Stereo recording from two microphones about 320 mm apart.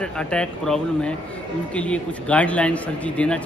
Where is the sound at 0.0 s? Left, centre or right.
Centre.